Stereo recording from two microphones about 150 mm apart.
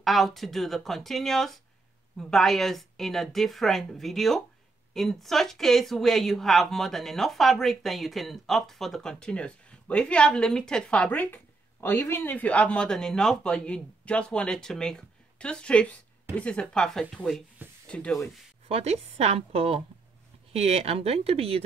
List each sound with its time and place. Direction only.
0.0 s speech: centre (ahead or behind)
18.7 s speech: 45° right (ahead or behind)